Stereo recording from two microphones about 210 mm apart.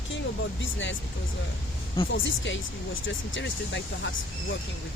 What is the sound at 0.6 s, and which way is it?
Speech, 60° left (ahead or behind).